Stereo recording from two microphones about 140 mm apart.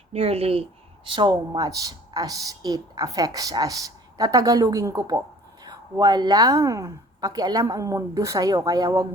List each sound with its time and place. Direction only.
0.1 s speech: 45° right (ahead or behind)
1.0 s speech: 35° right (ahead or behind)